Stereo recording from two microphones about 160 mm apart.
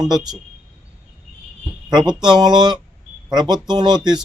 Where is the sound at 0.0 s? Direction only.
25° right (ahead or behind).